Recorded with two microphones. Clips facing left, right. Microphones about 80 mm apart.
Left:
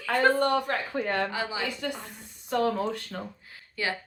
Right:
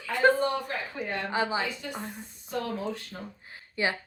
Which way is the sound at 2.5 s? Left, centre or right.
Left.